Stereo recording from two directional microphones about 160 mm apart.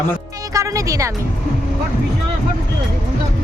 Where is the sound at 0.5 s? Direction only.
20° right (ahead or behind).